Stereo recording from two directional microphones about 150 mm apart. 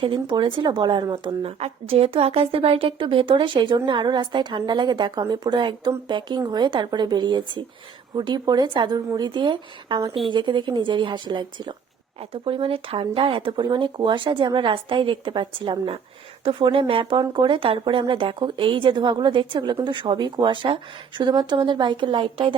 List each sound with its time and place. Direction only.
0.0 s a woman's voice: 35° right (ahead or behind)